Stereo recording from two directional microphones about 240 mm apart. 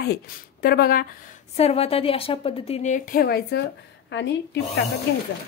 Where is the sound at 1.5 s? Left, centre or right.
Left.